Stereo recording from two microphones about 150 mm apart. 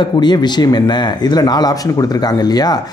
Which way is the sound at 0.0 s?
30° left (ahead or behind).